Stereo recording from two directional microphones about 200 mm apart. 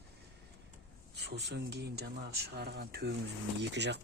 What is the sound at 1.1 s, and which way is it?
Speech, 55° right (ahead or behind).